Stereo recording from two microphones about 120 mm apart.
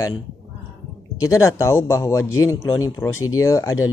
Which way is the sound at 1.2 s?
25° left (ahead or behind).